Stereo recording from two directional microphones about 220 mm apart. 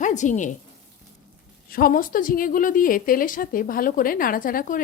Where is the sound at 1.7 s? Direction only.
40° left (ahead or behind).